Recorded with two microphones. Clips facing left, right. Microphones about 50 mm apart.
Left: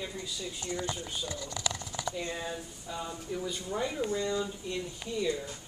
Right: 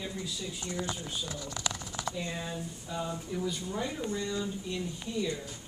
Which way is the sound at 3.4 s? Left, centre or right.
Centre.